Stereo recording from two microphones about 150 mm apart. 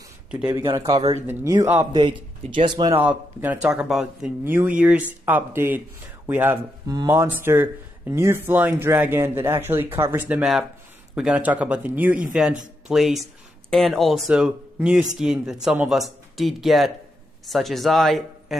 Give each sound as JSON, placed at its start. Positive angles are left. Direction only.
{"t": 0.3, "sound": "a man's voice", "side_deg": -5}
{"t": 0.8, "sound": "a man's voice", "side_deg": -40}
{"t": 1.2, "sound": "speech", "side_deg": -15}
{"t": 1.9, "sound": "a man's voice", "side_deg": -30}
{"t": 3.0, "sound": "speech", "side_deg": -10}